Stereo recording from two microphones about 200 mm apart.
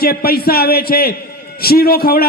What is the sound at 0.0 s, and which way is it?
A man's voice, 50° left (ahead or behind).